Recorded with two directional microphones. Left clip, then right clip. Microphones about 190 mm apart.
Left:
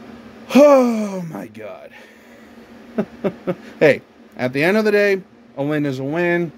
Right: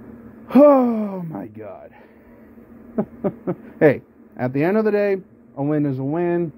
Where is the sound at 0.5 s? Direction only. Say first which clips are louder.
Left 2 dB; 15° left (ahead or behind).